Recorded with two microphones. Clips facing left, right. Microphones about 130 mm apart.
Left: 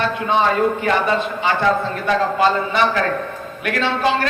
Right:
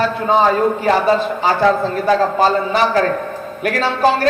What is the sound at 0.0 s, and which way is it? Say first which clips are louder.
A man's voice: right 4 dB; 35° right (ahead or behind).